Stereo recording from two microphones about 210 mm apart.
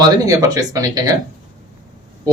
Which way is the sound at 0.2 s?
15° right (ahead or behind).